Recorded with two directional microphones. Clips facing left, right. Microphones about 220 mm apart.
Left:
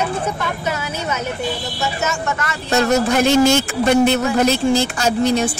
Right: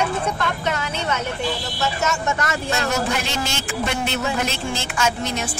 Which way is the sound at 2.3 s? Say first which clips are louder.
Right 1 dB; 40° right (ahead or behind).